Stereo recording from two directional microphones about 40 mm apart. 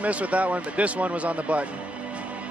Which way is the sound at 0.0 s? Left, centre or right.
Right.